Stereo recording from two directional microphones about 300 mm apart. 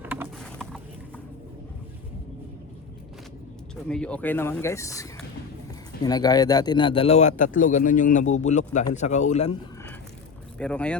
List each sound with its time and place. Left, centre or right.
0.0 s a sound: centre
3.8 s a man's voice: centre; by 9.6 s left
10.6 s speech: centre